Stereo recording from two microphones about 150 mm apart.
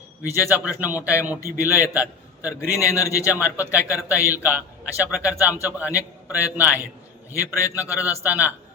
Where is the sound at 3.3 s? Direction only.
10° right (ahead or behind).